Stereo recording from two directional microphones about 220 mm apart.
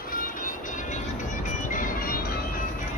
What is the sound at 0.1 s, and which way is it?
Music, 40° left (ahead or behind).